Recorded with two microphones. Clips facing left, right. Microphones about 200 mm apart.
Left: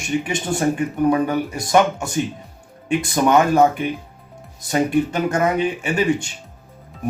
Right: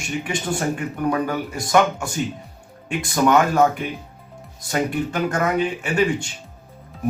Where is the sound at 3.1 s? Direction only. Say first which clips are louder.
Left 1 dB; 20° left (ahead or behind).